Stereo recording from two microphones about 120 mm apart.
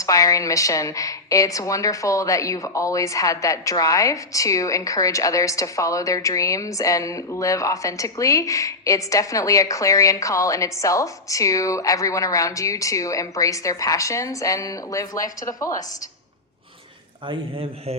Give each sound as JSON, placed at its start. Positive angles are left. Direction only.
{"t": 0.0, "sound": "a woman's voice", "side_deg": 30}
{"t": 17.2, "sound": "speech", "side_deg": -50}